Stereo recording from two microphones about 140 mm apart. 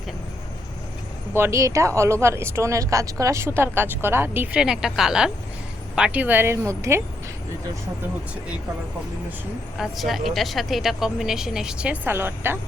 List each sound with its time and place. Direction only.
1.4 s speech: 20° right (ahead or behind)
4.6 s a woman's voice: 5° right (ahead or behind); by 7.0 s 20° right (ahead or behind)
9.7 s speech: centre (ahead or behind)